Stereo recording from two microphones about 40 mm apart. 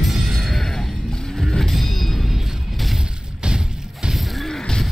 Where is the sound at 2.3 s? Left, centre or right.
Centre.